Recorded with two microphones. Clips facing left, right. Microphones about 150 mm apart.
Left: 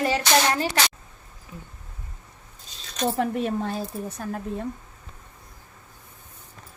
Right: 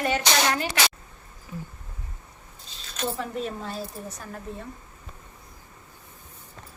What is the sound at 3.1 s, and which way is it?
Speech, 65° left (ahead or behind).